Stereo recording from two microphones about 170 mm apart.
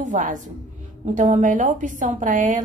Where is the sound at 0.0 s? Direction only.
50° right (ahead or behind).